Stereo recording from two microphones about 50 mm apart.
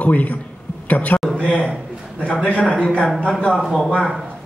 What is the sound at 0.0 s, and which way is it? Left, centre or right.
A man's voice, left.